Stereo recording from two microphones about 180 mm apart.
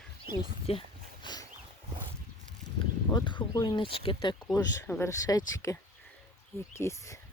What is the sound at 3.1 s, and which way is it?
Speech, 25° left (ahead or behind).